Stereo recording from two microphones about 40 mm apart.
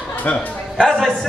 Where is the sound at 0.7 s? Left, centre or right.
Left.